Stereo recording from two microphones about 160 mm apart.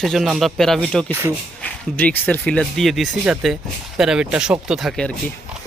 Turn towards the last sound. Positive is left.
turn(degrees=0)  # may be behind; listen again after turning